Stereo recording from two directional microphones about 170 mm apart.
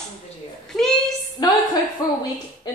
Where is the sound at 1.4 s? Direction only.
25° left (ahead or behind).